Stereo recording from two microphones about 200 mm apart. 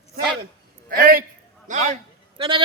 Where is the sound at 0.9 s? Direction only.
45° right (ahead or behind).